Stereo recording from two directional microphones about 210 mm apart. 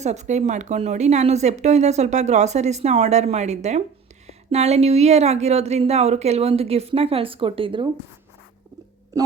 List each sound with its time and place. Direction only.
0.0 s a woman's voice: 35° right (ahead or behind)